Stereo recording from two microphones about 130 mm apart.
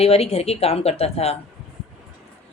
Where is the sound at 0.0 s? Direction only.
50° left (ahead or behind).